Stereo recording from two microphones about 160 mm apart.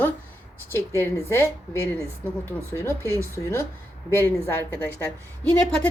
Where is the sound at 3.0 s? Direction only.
20° right (ahead or behind).